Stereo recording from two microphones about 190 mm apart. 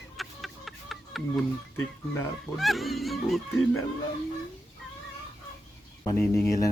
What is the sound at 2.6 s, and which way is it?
Music, centre (ahead or behind).